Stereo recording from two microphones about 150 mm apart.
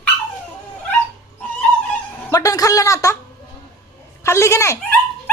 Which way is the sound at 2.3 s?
25° left (ahead or behind).